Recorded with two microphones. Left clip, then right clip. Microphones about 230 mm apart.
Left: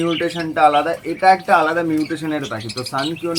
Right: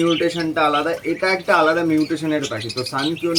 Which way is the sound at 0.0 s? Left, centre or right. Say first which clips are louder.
Right 2 dB; centre.